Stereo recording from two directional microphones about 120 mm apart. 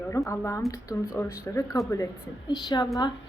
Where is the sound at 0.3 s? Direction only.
25° left (ahead or behind).